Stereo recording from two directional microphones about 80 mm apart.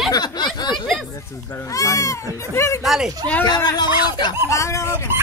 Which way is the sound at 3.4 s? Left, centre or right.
Left.